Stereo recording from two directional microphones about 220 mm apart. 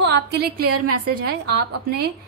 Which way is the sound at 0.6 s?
90° right.